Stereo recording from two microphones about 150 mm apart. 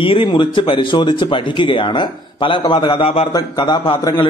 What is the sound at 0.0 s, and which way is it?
A man's voice, 35° left (ahead or behind).